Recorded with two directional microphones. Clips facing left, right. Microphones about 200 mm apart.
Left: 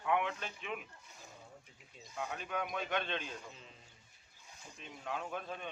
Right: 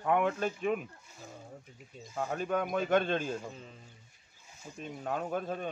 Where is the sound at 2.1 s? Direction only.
45° right (ahead or behind).